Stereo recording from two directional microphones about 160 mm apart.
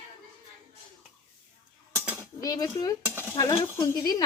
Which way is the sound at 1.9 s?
10° right (ahead or behind).